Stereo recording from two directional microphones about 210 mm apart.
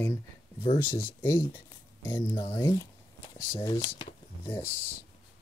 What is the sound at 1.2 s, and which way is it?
Speech, 10° left (ahead or behind).